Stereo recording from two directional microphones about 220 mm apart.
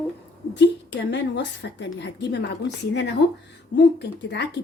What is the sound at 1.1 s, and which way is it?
A woman's voice, 50° left (ahead or behind).